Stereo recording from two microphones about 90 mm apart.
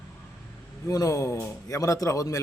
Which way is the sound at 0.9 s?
40° left (ahead or behind).